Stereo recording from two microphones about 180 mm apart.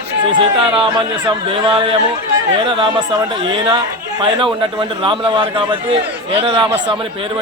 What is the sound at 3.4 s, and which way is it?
A man's voice, 30° right (ahead or behind).